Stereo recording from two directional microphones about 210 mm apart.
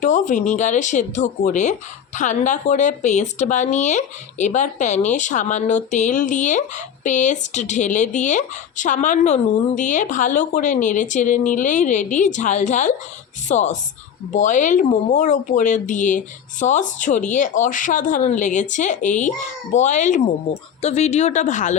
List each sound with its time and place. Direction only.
0.0 s speech: 35° left (ahead or behind)